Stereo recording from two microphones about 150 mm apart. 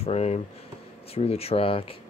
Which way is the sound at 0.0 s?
45° left (ahead or behind).